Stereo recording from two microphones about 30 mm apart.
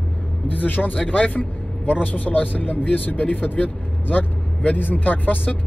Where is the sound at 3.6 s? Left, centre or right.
Left.